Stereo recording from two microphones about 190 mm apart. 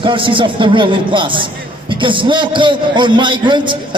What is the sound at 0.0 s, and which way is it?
A man's voice, 25° right (ahead or behind).